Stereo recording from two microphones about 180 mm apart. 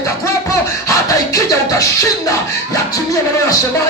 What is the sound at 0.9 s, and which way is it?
Music, 15° left (ahead or behind).